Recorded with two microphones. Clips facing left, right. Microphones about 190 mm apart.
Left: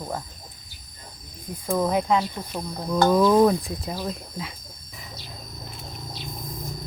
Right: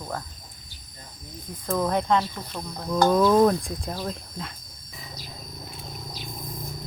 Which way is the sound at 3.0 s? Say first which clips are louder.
Left 1 dB; 5° left (ahead or behind).